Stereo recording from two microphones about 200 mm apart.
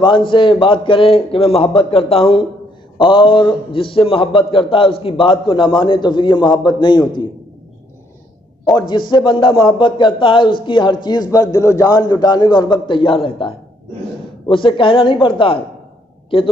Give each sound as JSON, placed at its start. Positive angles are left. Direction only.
{"t": 0.0, "sound": "a man's voice", "side_deg": 25}
{"t": 8.7, "sound": "a man's voice", "side_deg": 20}